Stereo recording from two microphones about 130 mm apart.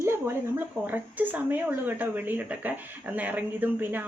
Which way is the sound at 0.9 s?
15° right (ahead or behind).